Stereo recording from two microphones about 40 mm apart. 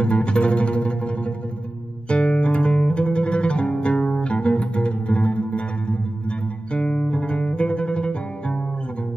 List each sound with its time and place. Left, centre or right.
0.0 s music: left
6.7 s guitar: left